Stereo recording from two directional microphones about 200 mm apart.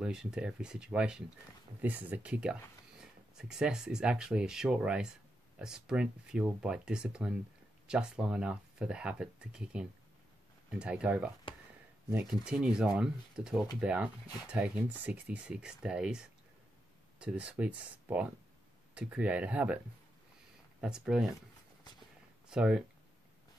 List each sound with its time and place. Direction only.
0.0 s speech: 5° right (ahead or behind)
14.2 s speech: 20° left (ahead or behind)
14.5 s speech: 5° right (ahead or behind)
20.8 s speech: 5° right (ahead or behind)
22.5 s speech: 5° right (ahead or behind)